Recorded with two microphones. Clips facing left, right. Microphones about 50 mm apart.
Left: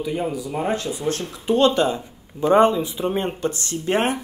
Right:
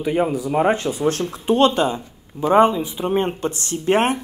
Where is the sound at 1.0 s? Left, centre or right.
Right.